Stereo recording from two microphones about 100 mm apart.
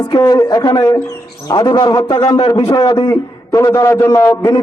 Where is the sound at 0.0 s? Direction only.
40° left (ahead or behind).